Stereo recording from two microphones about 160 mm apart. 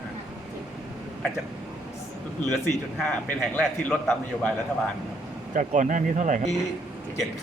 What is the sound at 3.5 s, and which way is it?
Speech, 10° left (ahead or behind).